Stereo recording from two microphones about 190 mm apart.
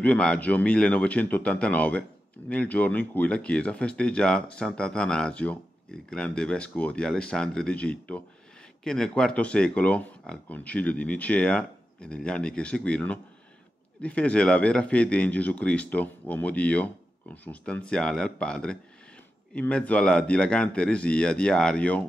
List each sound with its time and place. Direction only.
0.0 s speech: 5° left (ahead or behind)